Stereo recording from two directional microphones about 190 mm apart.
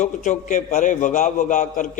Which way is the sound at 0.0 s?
40° left (ahead or behind).